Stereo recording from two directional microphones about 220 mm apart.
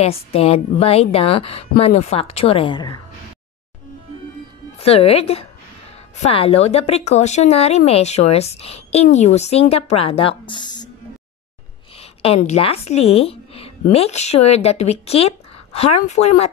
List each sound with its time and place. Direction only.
0.0 s a woman's voice: 25° left (ahead or behind)
4.7 s a woman's voice: 25° left (ahead or behind)
12.0 s a sound: 25° left (ahead or behind)
12.4 s a woman's voice: 30° left (ahead or behind)